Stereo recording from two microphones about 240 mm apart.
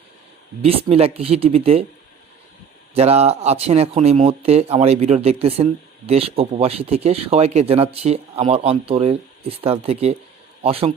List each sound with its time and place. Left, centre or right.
0.6 s speech: right
2.9 s speech: right